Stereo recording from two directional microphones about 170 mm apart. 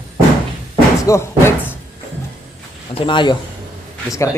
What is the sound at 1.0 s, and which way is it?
Speech, 15° left (ahead or behind).